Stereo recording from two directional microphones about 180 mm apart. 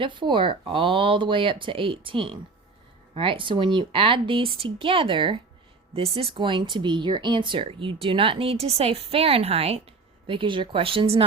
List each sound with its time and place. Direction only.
0.0 s speech: 25° right (ahead or behind)